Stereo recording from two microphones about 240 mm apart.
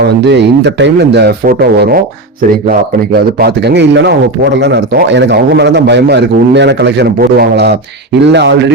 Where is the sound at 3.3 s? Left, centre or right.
Right.